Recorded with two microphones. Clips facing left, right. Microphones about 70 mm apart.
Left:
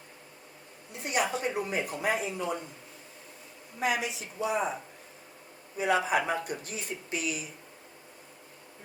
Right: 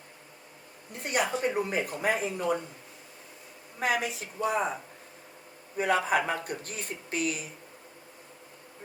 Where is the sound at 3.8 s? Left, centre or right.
Right.